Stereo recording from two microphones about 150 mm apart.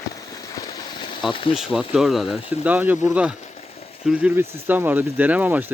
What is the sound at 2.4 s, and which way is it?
Speech, 40° left (ahead or behind).